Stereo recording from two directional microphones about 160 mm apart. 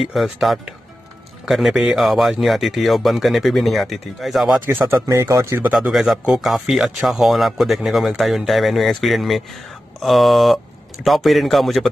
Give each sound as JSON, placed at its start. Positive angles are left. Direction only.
{"t": 0.0, "sound": "speech", "side_deg": 0}
{"t": 4.6, "sound": "speech", "side_deg": -15}
{"t": 5.7, "sound": "speech", "side_deg": -5}